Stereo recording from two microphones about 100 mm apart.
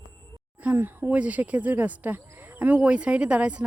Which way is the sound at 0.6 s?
15° right (ahead or behind).